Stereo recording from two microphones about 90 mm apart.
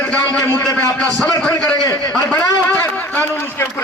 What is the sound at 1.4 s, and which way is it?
A man's voice, 15° left (ahead or behind).